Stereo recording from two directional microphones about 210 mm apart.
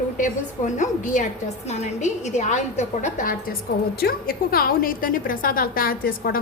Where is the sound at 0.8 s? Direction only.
35° left (ahead or behind).